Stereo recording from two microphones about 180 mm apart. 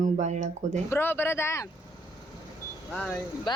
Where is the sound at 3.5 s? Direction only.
25° left (ahead or behind).